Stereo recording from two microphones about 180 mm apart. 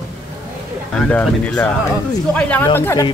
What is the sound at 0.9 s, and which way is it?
Speech, 10° left (ahead or behind).